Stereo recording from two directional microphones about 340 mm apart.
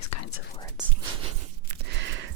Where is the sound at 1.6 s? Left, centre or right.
Right.